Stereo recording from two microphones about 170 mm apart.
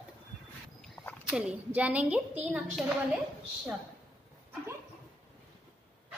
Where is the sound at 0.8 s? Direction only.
5° left (ahead or behind).